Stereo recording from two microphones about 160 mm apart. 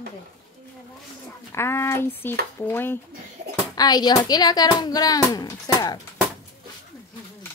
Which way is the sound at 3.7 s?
25° left (ahead or behind).